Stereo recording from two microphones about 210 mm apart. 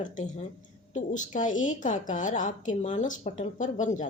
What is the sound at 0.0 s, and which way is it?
A woman's voice, 35° left (ahead or behind).